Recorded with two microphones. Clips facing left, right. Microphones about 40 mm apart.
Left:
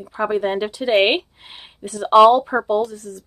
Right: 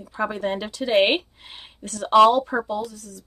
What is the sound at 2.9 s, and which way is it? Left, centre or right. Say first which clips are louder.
Speech: left 7 dB; left.